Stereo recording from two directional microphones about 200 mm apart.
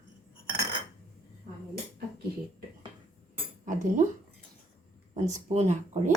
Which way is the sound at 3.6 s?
40° right (ahead or behind).